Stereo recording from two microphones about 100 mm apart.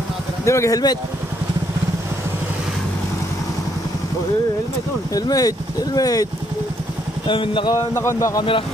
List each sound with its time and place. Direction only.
0.5 s speech: 30° left (ahead or behind)
5.1 s speech: 35° left (ahead or behind)
7.2 s speech: 55° left (ahead or behind)
7.7 s a man's voice: 30° left (ahead or behind)